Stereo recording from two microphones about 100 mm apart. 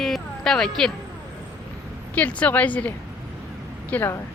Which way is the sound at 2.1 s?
15° left (ahead or behind).